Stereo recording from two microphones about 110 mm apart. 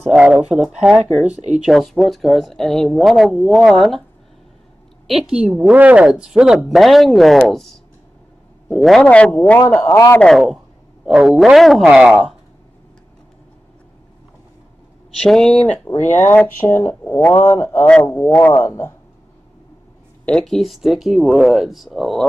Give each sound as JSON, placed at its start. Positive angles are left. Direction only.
{"t": 0.1, "sound": "a woman's voice", "side_deg": -10}
{"t": 5.0, "sound": "a woman's voice", "side_deg": -5}
{"t": 9.6, "sound": "speech", "side_deg": 25}
{"t": 10.2, "sound": "a woman's voice", "side_deg": 0}
{"t": 15.1, "sound": "a woman's voice", "side_deg": 5}
{"t": 16.0, "sound": "speech", "side_deg": 15}
{"t": 17.8, "sound": "speech", "side_deg": 10}
{"t": 18.5, "sound": "speech", "side_deg": 30}
{"t": 20.2, "sound": "a woman's voice", "side_deg": 5}